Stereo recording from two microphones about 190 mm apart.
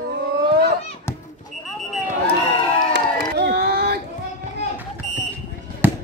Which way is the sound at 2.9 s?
60° right (ahead or behind).